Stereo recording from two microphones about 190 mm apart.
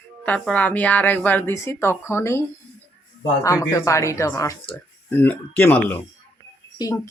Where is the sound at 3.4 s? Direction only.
15° left (ahead or behind).